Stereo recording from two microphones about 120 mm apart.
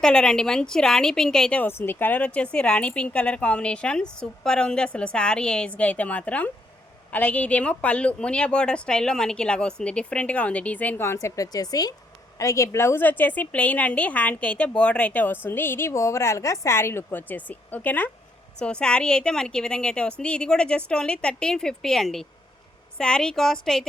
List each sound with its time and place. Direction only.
0.0 s a woman's voice: 5° left (ahead or behind)